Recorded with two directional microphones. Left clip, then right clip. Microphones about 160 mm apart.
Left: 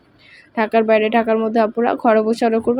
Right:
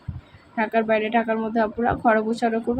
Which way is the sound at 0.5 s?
50° left (ahead or behind).